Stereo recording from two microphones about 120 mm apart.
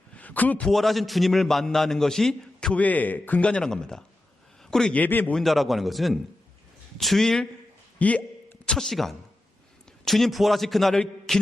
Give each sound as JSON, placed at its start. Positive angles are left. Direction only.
{"t": 0.2, "sound": "a man's voice", "side_deg": 15}
{"t": 0.7, "sound": "a man's voice", "side_deg": 0}
{"t": 5.3, "sound": "a man's voice", "side_deg": 0}